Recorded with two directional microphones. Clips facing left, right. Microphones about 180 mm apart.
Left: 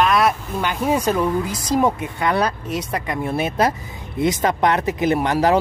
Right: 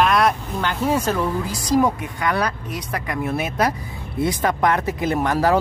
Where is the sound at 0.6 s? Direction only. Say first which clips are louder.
Left 1 dB; 15° left (ahead or behind).